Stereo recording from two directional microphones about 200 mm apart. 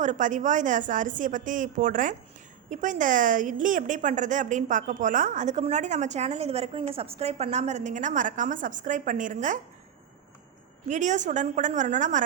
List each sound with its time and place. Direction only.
0.0 s speech: 40° right (ahead or behind)
10.8 s speech: 35° right (ahead or behind)